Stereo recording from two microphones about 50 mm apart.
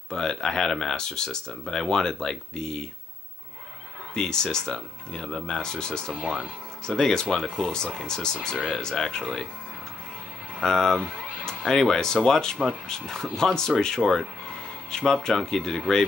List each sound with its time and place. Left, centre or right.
0.1 s speech: centre
4.1 s speech: centre
6.3 s speech: centre
7.0 s speech: centre
10.6 s speech: centre